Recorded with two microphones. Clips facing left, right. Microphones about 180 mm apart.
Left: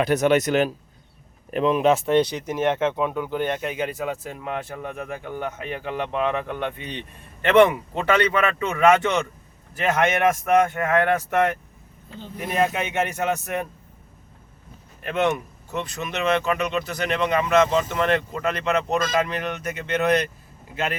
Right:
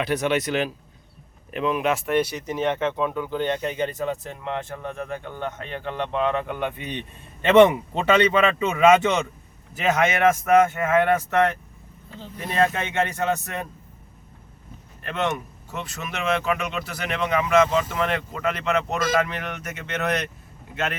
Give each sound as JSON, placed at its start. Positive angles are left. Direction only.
{"t": 0.0, "sound": "speech", "side_deg": 45}
{"t": 1.7, "sound": "speech", "side_deg": 25}
{"t": 6.5, "sound": "speech", "side_deg": -5}
{"t": 7.4, "sound": "speech", "side_deg": -20}
{"t": 10.4, "sound": "speech", "side_deg": -5}
{"t": 12.4, "sound": "speech", "side_deg": 10}
{"t": 15.0, "sound": "speech", "side_deg": 15}
{"t": 15.7, "sound": "speech", "side_deg": -5}